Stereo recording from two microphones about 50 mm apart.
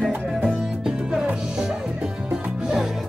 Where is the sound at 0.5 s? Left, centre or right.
Centre.